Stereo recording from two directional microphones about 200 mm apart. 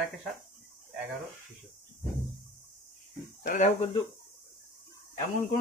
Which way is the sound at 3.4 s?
35° left (ahead or behind).